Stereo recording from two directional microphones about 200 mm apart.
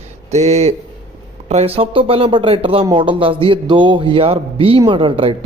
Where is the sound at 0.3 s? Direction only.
35° right (ahead or behind).